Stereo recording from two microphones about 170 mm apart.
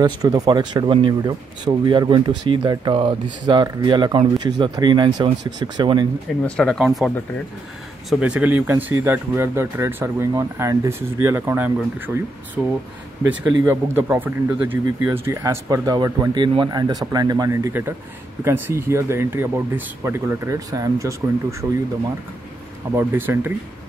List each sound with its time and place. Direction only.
0.0 s speech: 25° right (ahead or behind)
6.4 s speech: 5° left (ahead or behind)
8.1 s speech: 5° right (ahead or behind)
22.8 s speech: 15° right (ahead or behind)